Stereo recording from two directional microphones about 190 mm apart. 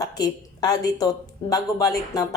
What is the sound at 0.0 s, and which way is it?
Speech, 20° left (ahead or behind).